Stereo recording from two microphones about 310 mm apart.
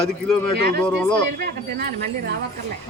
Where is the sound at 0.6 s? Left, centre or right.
Right.